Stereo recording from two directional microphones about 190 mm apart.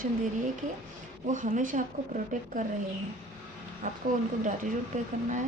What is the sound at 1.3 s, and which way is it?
A woman's voice, 40° right (ahead or behind).